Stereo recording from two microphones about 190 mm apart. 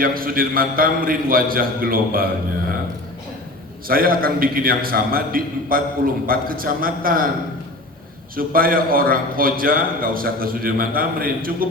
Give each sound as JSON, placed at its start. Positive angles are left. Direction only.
{"t": 0.0, "sound": "a man's voice", "side_deg": -50}
{"t": 3.8, "sound": "a man's voice", "side_deg": -50}
{"t": 8.4, "sound": "a man's voice", "side_deg": -50}